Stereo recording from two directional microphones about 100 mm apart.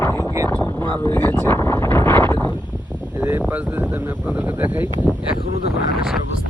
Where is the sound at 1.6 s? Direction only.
30° left (ahead or behind).